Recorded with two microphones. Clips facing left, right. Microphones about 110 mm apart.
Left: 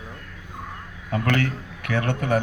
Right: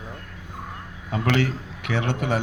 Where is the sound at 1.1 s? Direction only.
20° right (ahead or behind).